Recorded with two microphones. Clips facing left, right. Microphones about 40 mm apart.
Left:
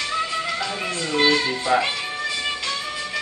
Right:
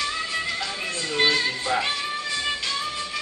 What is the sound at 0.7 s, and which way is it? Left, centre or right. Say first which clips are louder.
Speech: left 3 dB; centre.